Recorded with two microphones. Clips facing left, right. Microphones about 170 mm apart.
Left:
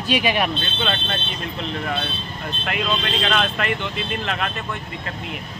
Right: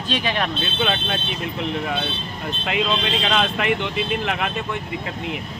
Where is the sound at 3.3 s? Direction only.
15° right (ahead or behind).